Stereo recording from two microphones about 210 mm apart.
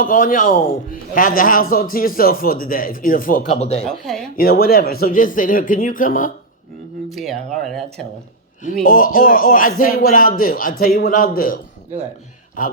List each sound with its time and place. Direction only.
0.0 s speech: 40° left (ahead or behind)
3.5 s speech: 30° left (ahead or behind)
3.8 s speech: centre (ahead or behind)
4.4 s speech: 45° left (ahead or behind)
7.1 s speech: centre (ahead or behind)
8.6 s speech: 40° left (ahead or behind)